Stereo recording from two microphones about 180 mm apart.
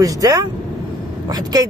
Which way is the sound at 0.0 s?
20° right (ahead or behind).